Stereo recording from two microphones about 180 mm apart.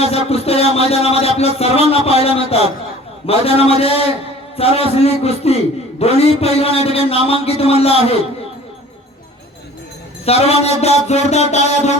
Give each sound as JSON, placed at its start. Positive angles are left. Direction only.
{"t": 0.0, "sound": "speech", "side_deg": 35}
{"t": 10.2, "sound": "speech", "side_deg": 35}